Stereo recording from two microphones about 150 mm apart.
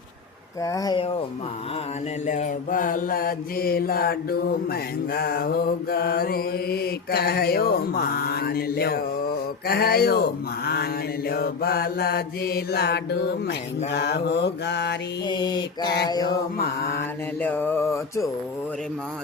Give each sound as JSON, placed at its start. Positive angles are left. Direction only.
{"t": 0.6, "sound": "mantra", "side_deg": 25}
{"t": 2.2, "sound": "mantra", "side_deg": 55}
{"t": 11.3, "sound": "mantra", "side_deg": 90}
{"t": 15.3, "sound": "mantra", "side_deg": 30}
{"t": 17.4, "sound": "music", "side_deg": 10}